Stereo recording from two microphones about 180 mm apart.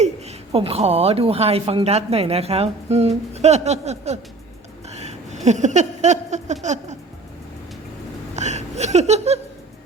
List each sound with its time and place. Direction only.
0.0 s a woman's voice: 35° right (ahead or behind)
4.9 s a sound: 40° right (ahead or behind)
8.4 s laughter: 40° right (ahead or behind)